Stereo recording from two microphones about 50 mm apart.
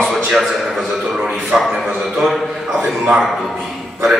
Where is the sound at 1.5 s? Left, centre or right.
Centre.